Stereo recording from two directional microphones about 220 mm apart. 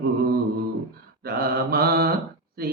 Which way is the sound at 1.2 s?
45° right (ahead or behind).